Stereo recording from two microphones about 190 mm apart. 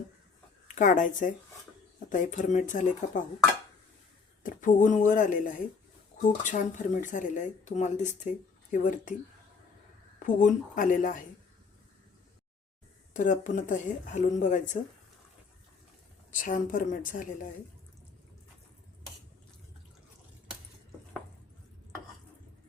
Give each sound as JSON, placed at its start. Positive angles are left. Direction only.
{"t": 0.8, "sound": "speech", "side_deg": 45}
{"t": 4.4, "sound": "speech", "side_deg": 40}
{"t": 10.2, "sound": "speech", "side_deg": 45}
{"t": 13.1, "sound": "speech", "side_deg": 40}
{"t": 16.3, "sound": "speech", "side_deg": 45}